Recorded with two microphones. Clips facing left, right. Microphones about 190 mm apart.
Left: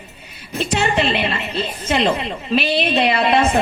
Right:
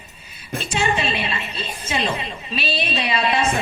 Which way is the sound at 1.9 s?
70° left (ahead or behind).